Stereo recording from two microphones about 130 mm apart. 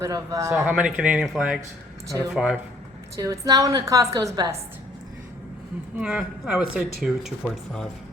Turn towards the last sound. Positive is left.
turn(degrees=0)  # may be behind; listen again after turning